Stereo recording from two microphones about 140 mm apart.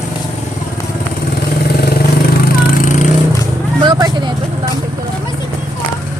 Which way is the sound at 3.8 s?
30° right (ahead or behind).